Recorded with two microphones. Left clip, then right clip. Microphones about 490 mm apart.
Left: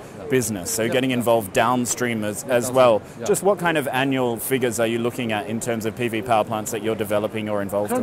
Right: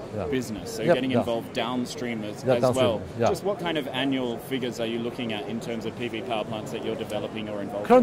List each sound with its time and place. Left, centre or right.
0.3 s speech: left